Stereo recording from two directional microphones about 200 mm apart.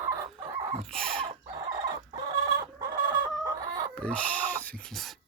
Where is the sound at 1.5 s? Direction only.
20° right (ahead or behind).